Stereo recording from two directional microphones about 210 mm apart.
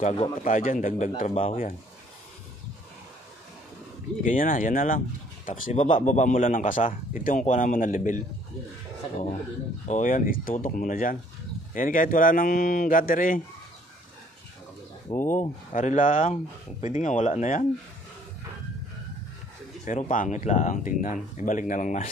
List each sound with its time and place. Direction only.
0.0 s speech: 35° left (ahead or behind)
4.2 s speech: 40° left (ahead or behind)
9.8 s speech: 35° left (ahead or behind)
15.1 s speech: 30° left (ahead or behind)
19.8 s speech: 35° left (ahead or behind)